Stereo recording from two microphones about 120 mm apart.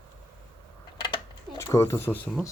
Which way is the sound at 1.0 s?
40° left (ahead or behind).